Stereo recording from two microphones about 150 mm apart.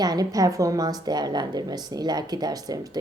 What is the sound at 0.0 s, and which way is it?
A woman's voice, 25° right (ahead or behind).